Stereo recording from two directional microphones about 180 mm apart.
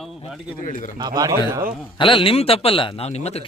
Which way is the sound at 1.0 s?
20° right (ahead or behind).